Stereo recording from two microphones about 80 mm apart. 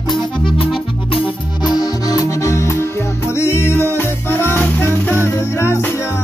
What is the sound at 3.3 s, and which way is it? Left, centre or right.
Music, left.